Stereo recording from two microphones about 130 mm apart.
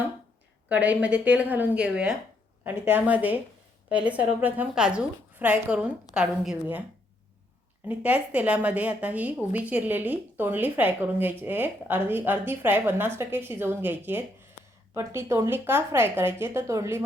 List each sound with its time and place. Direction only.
0.7 s speech: 10° right (ahead or behind)
7.9 s a woman's voice: 10° right (ahead or behind)